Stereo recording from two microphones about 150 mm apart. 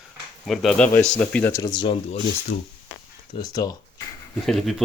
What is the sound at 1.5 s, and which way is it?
Speech, 30° left (ahead or behind).